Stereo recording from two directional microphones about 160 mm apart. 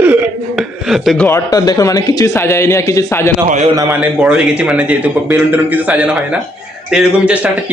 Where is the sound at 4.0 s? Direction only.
5° right (ahead or behind).